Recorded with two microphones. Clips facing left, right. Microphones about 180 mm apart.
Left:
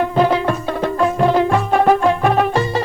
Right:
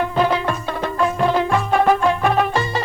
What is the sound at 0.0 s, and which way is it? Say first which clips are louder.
Music: left 3 dB; 40° left (ahead or behind).